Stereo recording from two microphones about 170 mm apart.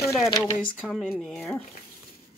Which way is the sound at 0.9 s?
5° left (ahead or behind).